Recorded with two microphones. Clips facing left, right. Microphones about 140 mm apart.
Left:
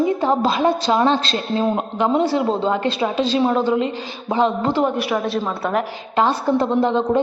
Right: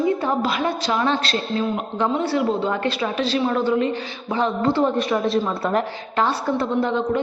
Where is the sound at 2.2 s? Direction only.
15° left (ahead or behind).